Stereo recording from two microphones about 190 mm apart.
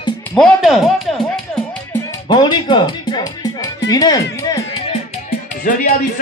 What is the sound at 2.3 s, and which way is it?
Music, 25° left (ahead or behind).